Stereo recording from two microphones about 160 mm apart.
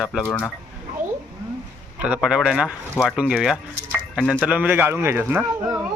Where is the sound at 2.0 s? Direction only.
5° right (ahead or behind).